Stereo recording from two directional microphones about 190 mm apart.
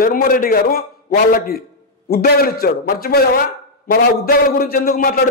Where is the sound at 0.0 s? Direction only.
50° left (ahead or behind).